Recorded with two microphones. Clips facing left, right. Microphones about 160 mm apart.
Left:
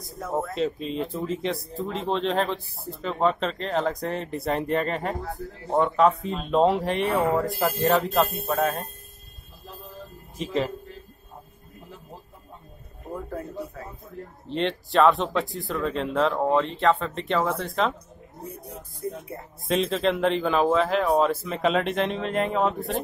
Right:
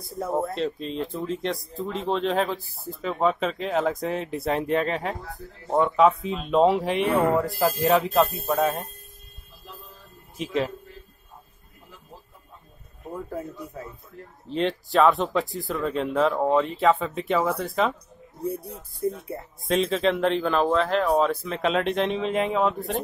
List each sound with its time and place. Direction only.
0.2 s speech: 30° right (ahead or behind)
0.6 s speech: 5° left (ahead or behind)
10.3 s speech: centre (ahead or behind)
14.5 s speech: centre (ahead or behind)
19.7 s speech: centre (ahead or behind)